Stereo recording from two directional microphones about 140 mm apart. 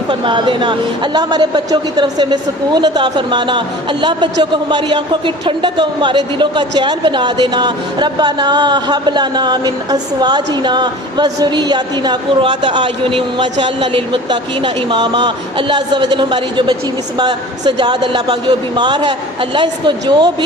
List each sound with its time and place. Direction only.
0.1 s speech: 35° right (ahead or behind)